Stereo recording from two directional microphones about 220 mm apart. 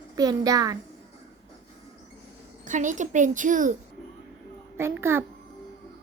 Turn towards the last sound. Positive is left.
turn(degrees=-10)  # may be behind; listen again after turning